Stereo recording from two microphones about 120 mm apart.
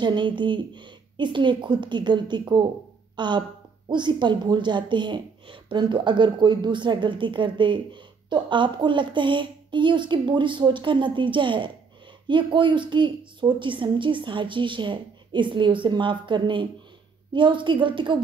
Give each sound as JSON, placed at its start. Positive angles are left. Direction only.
{"t": 0.0, "sound": "a woman's voice", "side_deg": -40}